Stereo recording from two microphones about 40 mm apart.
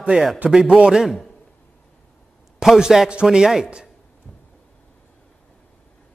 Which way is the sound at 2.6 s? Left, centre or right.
Centre.